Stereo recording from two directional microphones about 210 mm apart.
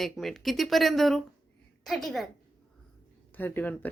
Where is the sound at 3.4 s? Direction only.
10° left (ahead or behind).